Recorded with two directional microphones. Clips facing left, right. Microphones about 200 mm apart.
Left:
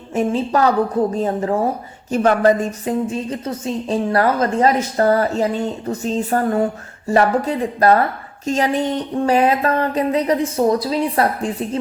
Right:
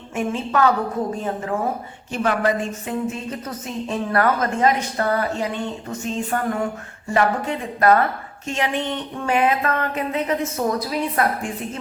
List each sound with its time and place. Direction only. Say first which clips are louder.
0.1 s a woman's voice: left 5 dB; 35° left (ahead or behind)
2.1 s a woman's voice: left 6 dB; 45° left (ahead or behind)